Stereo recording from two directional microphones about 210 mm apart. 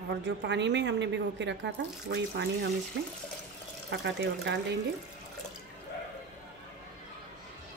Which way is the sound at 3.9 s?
55° right (ahead or behind).